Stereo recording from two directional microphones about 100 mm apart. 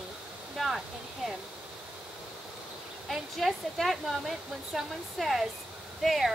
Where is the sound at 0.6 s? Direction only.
Centre (ahead or behind).